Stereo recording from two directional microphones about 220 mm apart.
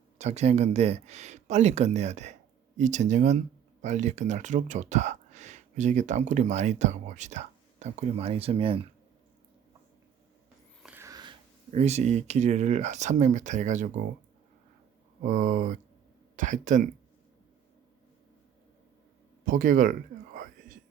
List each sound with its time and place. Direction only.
0.2 s speech: 30° right (ahead or behind)
10.8 s speech: 10° right (ahead or behind); by 14.0 s 35° right (ahead or behind)
15.2 s speech: 35° right (ahead or behind)
19.5 s speech: 40° right (ahead or behind)